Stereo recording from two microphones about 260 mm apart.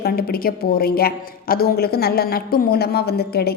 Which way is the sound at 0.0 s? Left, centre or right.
Left.